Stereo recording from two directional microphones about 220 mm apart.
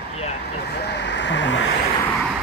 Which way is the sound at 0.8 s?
50° left (ahead or behind).